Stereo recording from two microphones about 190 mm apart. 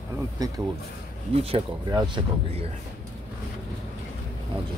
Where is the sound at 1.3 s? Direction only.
30° right (ahead or behind).